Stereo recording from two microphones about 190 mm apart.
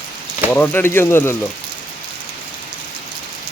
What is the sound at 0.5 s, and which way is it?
Speech, 10° left (ahead or behind).